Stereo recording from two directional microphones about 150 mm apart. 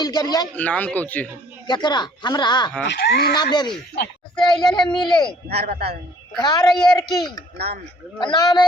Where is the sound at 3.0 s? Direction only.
90° left.